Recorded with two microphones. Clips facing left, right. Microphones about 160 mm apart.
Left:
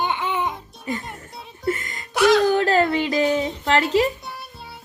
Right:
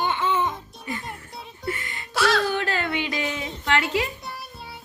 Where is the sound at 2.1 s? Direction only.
15° left (ahead or behind).